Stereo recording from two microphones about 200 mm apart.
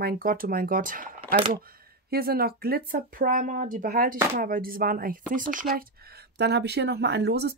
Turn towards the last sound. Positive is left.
turn(degrees=-55)  # may be behind; listen again after turning